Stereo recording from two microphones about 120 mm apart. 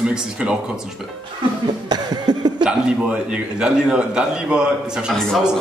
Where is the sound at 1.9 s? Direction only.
35° right (ahead or behind).